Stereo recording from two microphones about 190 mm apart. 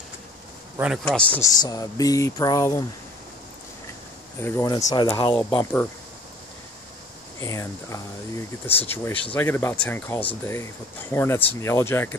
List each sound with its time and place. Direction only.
0.7 s a man's voice: 5° right (ahead or behind)
1.5 s a sound: 20° left (ahead or behind)
4.4 s speech: 15° left (ahead or behind)
7.3 s speech: 15° left (ahead or behind)